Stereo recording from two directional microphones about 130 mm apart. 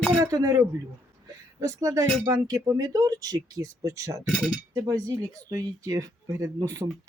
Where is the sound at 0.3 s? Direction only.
25° right (ahead or behind).